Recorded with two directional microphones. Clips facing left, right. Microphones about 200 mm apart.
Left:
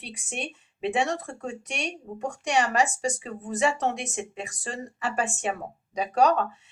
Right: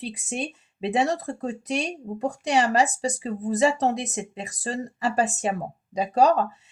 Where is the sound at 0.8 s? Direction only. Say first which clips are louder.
Right 3 dB; 35° right (ahead or behind).